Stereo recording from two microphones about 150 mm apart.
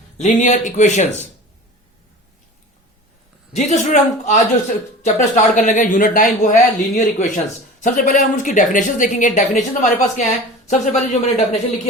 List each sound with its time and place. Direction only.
0.2 s speech: 55° left (ahead or behind)
3.5 s speech: 45° left (ahead or behind)